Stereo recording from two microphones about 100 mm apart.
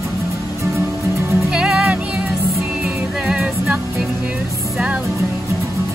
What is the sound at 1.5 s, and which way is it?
Music, 5° right (ahead or behind).